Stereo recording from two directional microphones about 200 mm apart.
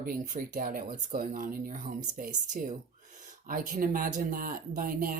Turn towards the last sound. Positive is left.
turn(degrees=-45)  # may be behind; listen again after turning